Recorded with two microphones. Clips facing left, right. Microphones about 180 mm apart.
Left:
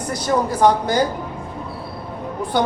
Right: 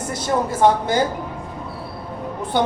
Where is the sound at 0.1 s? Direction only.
25° right (ahead or behind).